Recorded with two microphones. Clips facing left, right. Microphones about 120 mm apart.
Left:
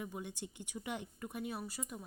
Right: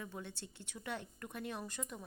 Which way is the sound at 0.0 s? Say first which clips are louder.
Left 3 dB; 15° left (ahead or behind).